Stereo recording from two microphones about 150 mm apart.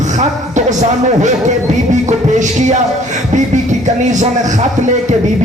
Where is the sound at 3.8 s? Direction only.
55° right (ahead or behind).